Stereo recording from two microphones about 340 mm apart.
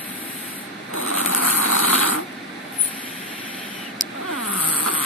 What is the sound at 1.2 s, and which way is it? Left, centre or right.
Vehicle, left.